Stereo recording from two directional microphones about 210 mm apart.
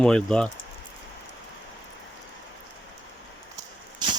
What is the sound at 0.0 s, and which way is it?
Speech, 5° left (ahead or behind).